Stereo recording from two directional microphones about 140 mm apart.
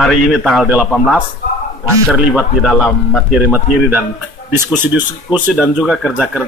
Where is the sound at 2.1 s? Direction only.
10° right (ahead or behind).